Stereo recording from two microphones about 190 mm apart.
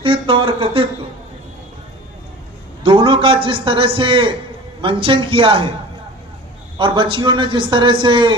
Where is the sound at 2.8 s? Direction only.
25° right (ahead or behind).